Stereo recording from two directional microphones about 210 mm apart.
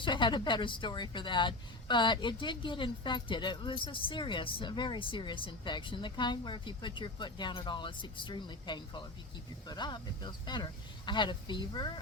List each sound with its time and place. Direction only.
0.0 s speech: 20° left (ahead or behind)